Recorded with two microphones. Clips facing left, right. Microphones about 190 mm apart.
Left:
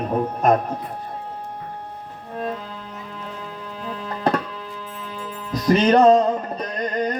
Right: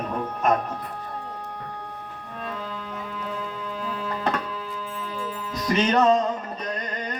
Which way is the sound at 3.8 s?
35° left (ahead or behind).